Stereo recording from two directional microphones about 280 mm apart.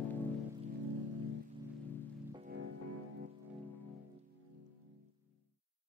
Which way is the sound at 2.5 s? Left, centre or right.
Right.